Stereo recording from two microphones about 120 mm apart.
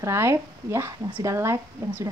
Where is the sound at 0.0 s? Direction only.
20° right (ahead or behind).